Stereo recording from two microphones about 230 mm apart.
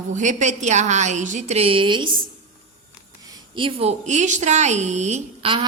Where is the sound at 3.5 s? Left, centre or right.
Right.